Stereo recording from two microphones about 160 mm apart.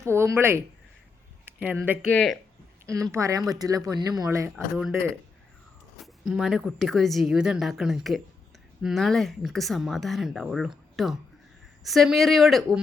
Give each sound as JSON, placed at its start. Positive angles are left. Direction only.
{"t": 0.0, "sound": "speech", "side_deg": -15}
{"t": 2.0, "sound": "speech", "side_deg": 5}
{"t": 2.8, "sound": "speech", "side_deg": -20}
{"t": 6.0, "sound": "speech", "side_deg": 0}